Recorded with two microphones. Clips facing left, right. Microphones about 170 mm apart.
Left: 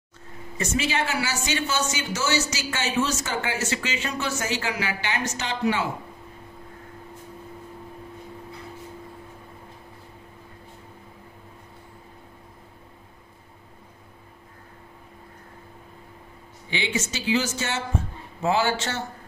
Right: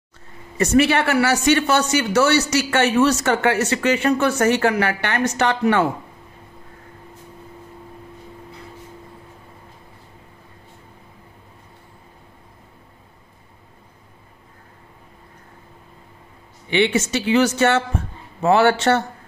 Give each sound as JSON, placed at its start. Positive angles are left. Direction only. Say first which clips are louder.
{"t": 0.6, "sound": "speech", "louder": "right 10 dB", "side_deg": -65}
{"t": 16.7, "sound": "speech", "louder": "right 10 dB", "side_deg": -65}